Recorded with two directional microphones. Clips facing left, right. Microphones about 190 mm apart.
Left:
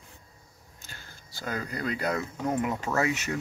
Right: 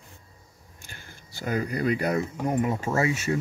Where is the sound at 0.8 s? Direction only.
15° right (ahead or behind).